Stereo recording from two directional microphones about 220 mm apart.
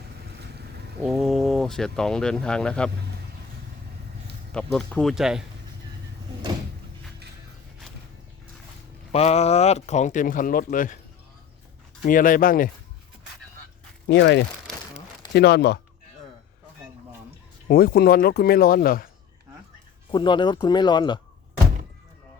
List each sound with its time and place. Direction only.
1.0 s speech: centre (ahead or behind)
4.5 s speech: 5° left (ahead or behind)
9.1 s speech: 30° left (ahead or behind)
12.0 s speech: 40° left (ahead or behind)
14.1 s speech: 55° left (ahead or behind)
17.7 s speech: 45° left (ahead or behind)
20.1 s speech: 20° left (ahead or behind)